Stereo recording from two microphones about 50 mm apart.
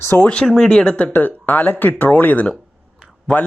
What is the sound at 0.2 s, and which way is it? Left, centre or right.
Speech, centre.